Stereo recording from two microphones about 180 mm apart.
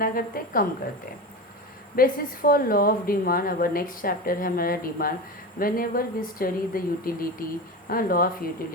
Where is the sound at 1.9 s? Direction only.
55° left (ahead or behind).